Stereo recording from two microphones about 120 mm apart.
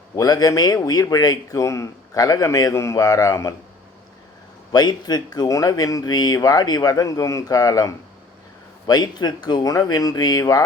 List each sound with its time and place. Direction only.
0.2 s speech: 35° left (ahead or behind)
4.7 s speech: 35° left (ahead or behind)